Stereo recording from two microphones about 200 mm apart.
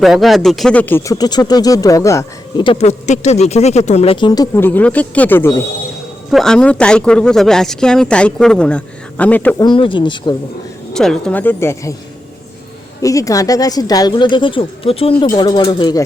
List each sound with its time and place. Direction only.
0.0 s speech: centre (ahead or behind)
9.6 s speech: 25° left (ahead or behind)
10.9 s speech: 5° left (ahead or behind)
13.0 s speech: 15° left (ahead or behind)